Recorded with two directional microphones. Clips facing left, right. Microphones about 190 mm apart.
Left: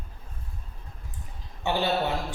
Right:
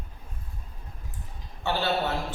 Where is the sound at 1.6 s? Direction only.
15° left (ahead or behind).